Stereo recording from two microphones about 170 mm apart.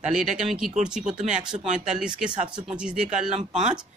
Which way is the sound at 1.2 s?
45° right (ahead or behind).